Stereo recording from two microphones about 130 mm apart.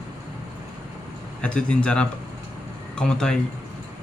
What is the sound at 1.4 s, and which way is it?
Speech, 10° left (ahead or behind).